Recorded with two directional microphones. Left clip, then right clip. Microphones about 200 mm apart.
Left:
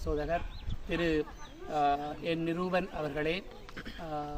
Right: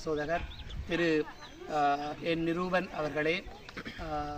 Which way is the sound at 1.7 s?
15° left (ahead or behind).